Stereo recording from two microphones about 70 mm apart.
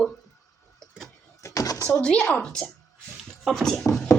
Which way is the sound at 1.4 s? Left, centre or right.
Left.